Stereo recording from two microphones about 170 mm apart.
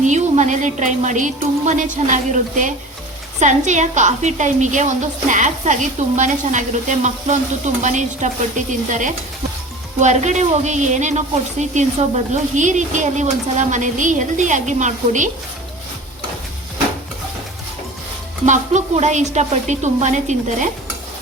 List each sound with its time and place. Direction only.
0.0 s a woman's voice: 45° right (ahead or behind)
18.4 s a woman's voice: 45° right (ahead or behind)